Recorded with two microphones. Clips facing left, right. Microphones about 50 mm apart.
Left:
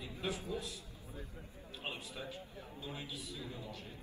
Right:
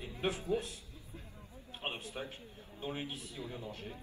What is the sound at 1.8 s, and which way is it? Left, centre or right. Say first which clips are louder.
A man's voice: right 3 dB; right.